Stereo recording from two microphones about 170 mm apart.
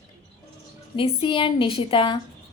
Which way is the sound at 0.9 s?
30° left (ahead or behind).